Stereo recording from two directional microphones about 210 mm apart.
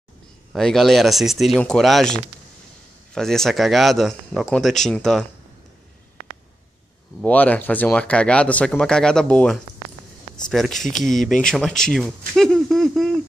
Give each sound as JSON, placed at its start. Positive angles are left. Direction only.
{"t": 0.5, "sound": "speech", "side_deg": 0}
{"t": 3.2, "sound": "speech", "side_deg": 0}
{"t": 7.2, "sound": "speech", "side_deg": 5}